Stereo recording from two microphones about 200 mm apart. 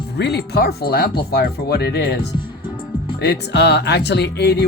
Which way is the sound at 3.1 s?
55° left (ahead or behind).